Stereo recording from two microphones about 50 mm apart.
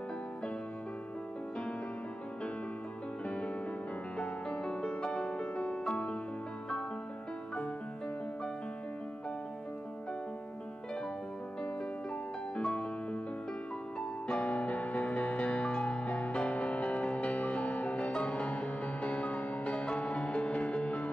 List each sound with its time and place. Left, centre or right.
3.3 s music: left
12.6 s music: left
14.2 s music: left